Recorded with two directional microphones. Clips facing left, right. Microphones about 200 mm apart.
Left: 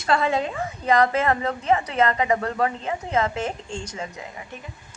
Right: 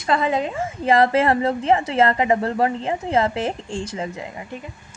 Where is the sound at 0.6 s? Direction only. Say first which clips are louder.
Right 3 dB; 30° right (ahead or behind).